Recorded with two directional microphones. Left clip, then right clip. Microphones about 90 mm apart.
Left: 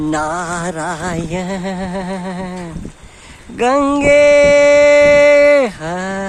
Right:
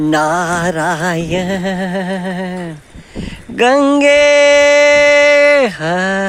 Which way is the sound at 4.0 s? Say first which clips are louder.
Left 1 dB; 25° right (ahead or behind).